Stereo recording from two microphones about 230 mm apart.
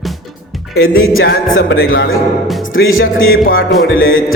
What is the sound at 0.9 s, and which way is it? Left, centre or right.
Music, left.